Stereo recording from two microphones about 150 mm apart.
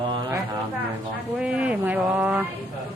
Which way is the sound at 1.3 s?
5° right (ahead or behind).